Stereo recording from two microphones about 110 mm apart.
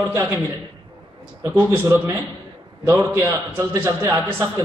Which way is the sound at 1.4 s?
25° right (ahead or behind).